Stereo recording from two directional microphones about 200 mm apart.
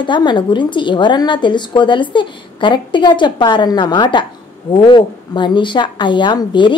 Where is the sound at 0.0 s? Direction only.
25° left (ahead or behind).